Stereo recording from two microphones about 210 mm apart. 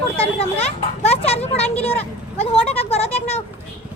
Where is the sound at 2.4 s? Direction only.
30° left (ahead or behind).